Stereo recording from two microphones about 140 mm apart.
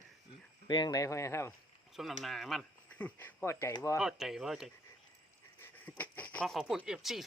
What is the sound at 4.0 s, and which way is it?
Speech, 5° right (ahead or behind).